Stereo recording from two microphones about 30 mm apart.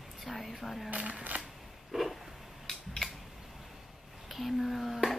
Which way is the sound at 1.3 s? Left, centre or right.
Right.